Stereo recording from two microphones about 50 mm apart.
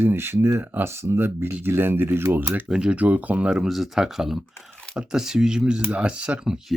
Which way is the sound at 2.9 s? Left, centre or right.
Right.